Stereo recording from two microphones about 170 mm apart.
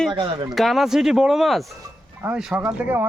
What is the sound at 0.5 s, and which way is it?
Speech, centre (ahead or behind).